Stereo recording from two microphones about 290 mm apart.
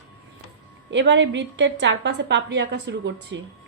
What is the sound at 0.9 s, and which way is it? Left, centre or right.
A woman's voice, right.